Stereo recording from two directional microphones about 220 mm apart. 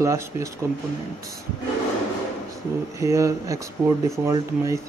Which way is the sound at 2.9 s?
15° right (ahead or behind).